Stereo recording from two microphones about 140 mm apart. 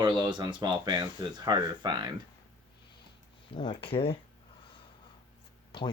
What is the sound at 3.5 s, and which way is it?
Speech, 40° left (ahead or behind).